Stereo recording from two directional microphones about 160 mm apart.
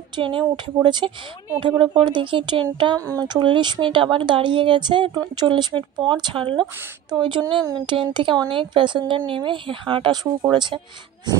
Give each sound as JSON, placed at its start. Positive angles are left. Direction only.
{"t": 0.1, "sound": "a woman's voice", "side_deg": -30}